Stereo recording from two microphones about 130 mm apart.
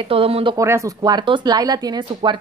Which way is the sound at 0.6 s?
25° right (ahead or behind).